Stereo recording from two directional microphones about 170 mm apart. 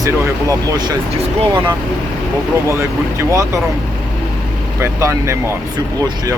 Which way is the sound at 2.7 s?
15° right (ahead or behind).